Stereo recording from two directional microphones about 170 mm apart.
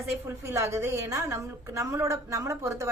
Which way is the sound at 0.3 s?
15° right (ahead or behind).